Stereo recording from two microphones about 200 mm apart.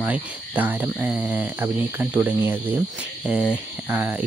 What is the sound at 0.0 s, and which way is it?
Speech, 10° right (ahead or behind).